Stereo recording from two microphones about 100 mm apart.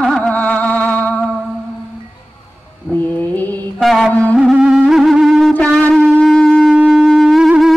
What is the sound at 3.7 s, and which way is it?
Mantra, centre (ahead or behind).